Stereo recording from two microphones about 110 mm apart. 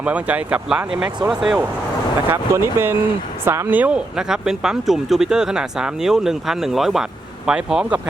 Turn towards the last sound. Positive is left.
turn(degrees=-10)  # may be behind; listen again after turning